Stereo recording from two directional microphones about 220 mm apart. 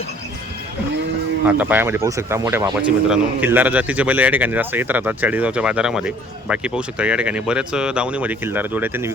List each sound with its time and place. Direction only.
1.5 s speech: 10° right (ahead or behind)